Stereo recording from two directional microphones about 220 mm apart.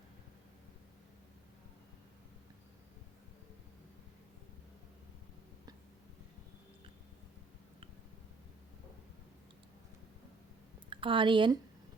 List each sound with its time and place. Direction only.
10.8 s speech: 20° right (ahead or behind)